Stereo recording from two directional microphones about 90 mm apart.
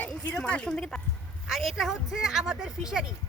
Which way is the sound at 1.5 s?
Centre (ahead or behind).